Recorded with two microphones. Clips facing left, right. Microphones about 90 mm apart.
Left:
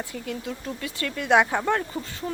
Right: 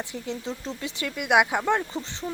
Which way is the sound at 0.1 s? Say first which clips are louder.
Even; 25° right (ahead or behind).